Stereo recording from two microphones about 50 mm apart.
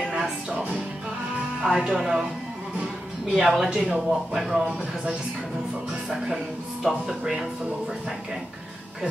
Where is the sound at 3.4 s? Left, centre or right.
Centre.